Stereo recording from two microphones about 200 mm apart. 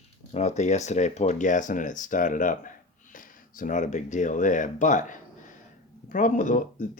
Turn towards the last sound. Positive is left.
turn(degrees=40)  # may be behind; listen again after turning